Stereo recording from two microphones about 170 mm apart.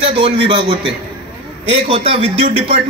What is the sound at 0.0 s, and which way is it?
A man's voice, 30° right (ahead or behind).